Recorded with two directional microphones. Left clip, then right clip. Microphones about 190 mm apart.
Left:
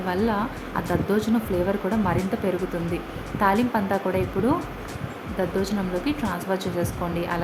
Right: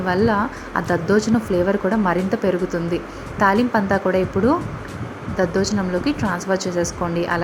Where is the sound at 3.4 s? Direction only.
15° right (ahead or behind).